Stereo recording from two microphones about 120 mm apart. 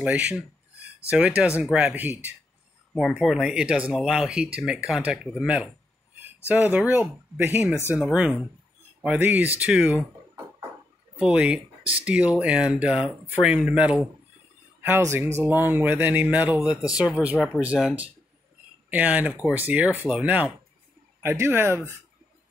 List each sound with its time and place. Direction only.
0.0 s speech: 10° right (ahead or behind)
2.9 s speech: centre (ahead or behind)
11.1 s speech: 10° right (ahead or behind)
14.8 s speech: 20° right (ahead or behind)